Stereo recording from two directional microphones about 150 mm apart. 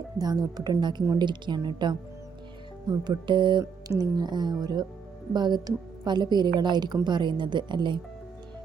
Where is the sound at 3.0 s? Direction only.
30° right (ahead or behind).